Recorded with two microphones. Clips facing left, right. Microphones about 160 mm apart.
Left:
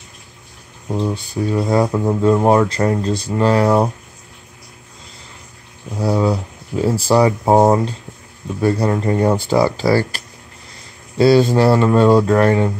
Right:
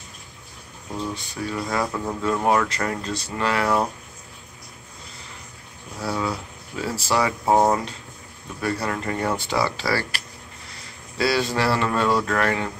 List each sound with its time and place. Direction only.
0.8 s speech: 30° left (ahead or behind)
6.0 s speech: 30° left (ahead or behind)
11.1 s speech: 25° left (ahead or behind)